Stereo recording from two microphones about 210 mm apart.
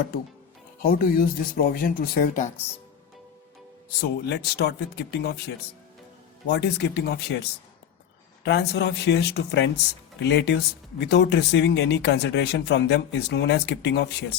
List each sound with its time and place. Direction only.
0.8 s speech: 45° left (ahead or behind)
4.0 s speech: 50° left (ahead or behind)
8.4 s speech: 50° left (ahead or behind)